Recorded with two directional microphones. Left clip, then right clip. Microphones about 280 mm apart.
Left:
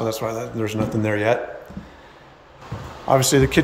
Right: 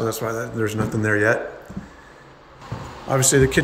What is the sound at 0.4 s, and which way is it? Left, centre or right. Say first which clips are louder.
A man's voice: right 1 dB; centre.